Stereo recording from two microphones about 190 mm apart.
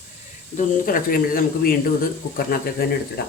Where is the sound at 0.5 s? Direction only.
45° left (ahead or behind).